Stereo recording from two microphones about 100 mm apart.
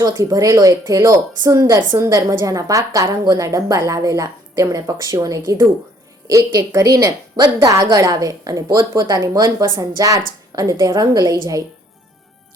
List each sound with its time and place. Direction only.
0.0 s a woman's voice: 40° right (ahead or behind)